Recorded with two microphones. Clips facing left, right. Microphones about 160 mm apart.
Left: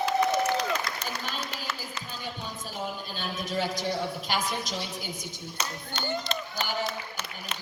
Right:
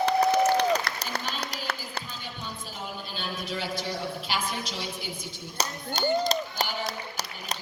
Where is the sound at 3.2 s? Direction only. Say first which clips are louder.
Left 3 dB; 45° left (ahead or behind).